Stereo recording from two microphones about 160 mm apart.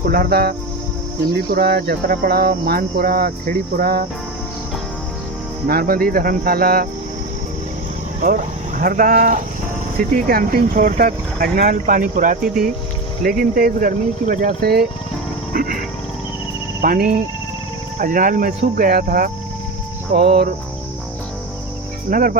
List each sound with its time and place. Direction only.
0.0 s speech: 65° right (ahead or behind)
5.6 s speech: 70° right (ahead or behind)
8.8 s speech: 60° right (ahead or behind)
15.5 s music: 60° right (ahead or behind)
16.8 s speech: 60° right (ahead or behind)
20.2 s cricket: 85° right
22.1 s speech: 60° right (ahead or behind)